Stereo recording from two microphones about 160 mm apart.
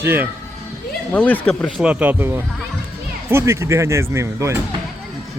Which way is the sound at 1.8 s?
10° right (ahead or behind).